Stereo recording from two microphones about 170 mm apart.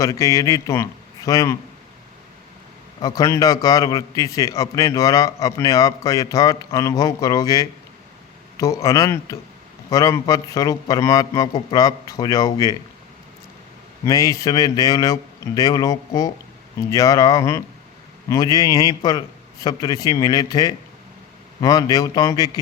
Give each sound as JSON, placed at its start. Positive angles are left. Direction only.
{"t": 0.0, "sound": "a man's voice", "side_deg": 20}
{"t": 3.0, "sound": "a man's voice", "side_deg": 20}
{"t": 14.0, "sound": "a man's voice", "side_deg": 20}